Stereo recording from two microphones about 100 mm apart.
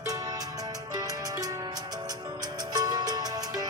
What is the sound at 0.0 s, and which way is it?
Music, 40° right (ahead or behind).